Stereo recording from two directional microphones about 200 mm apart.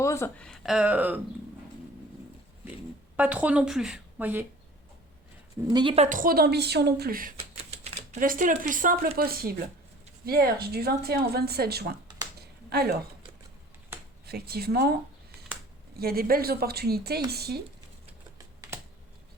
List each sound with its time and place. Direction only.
0.0 s speech: 15° left (ahead or behind); by 1.2 s 10° right (ahead or behind)
3.2 s a woman's voice: 5° right (ahead or behind)
5.6 s a woman's voice: 25° right (ahead or behind); by 7.3 s 45° right (ahead or behind)
7.5 s a woman's voice: 35° right (ahead or behind); by 13.0 s 50° right (ahead or behind)
14.3 s a woman's voice: 50° right (ahead or behind)
16.0 s a woman's voice: 50° right (ahead or behind)
18.6 s computer keyboard: 15° right (ahead or behind)